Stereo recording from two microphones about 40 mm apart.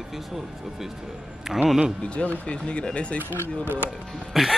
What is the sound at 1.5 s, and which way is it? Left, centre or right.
Speech, centre.